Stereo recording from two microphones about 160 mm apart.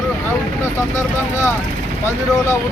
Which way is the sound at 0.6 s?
15° left (ahead or behind).